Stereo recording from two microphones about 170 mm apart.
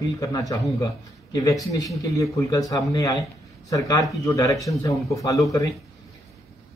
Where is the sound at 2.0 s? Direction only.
20° left (ahead or behind).